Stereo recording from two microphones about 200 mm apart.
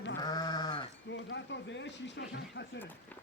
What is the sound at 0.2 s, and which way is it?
Sheep, 20° left (ahead or behind).